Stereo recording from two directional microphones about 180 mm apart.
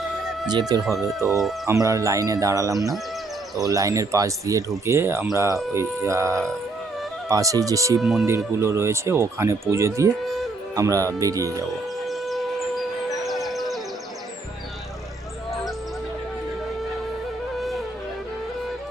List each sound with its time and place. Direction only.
0.7 s speech: 25° right (ahead or behind)
8.0 s speech: centre (ahead or behind)
8.5 s speech: 15° right (ahead or behind)
12.0 s a sound: centre (ahead or behind)
17.6 s music: centre (ahead or behind)